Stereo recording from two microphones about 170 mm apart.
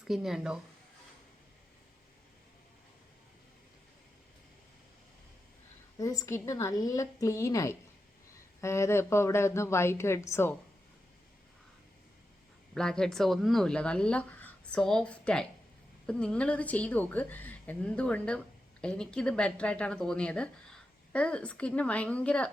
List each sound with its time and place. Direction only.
0.1 s speech: 5° right (ahead or behind)
6.0 s speech: 20° left (ahead or behind)
12.7 s speech: 5° left (ahead or behind)